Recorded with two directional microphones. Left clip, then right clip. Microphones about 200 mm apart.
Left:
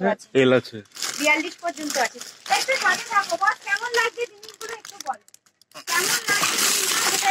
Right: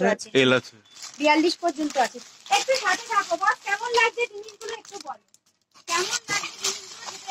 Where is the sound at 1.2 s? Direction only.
55° right (ahead or behind).